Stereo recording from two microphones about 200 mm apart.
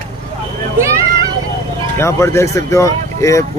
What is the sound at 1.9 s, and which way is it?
Speech, 15° left (ahead or behind).